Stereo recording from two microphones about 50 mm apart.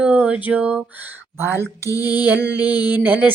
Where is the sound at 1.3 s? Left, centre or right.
Right.